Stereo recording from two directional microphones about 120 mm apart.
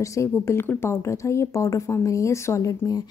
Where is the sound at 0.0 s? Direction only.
25° left (ahead or behind).